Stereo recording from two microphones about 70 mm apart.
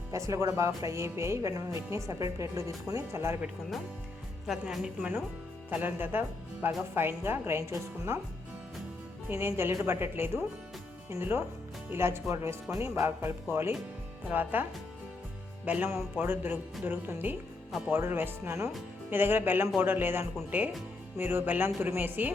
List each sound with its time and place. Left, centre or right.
0.1 s speech: right
4.4 s a woman's voice: centre
5.7 s a woman's voice: right
9.3 s a woman's voice: right
17.7 s speech: centre
17.9 s a woman's voice: right